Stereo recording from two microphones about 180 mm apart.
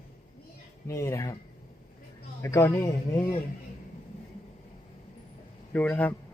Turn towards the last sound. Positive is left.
turn(degrees=10)  # may be behind; listen again after turning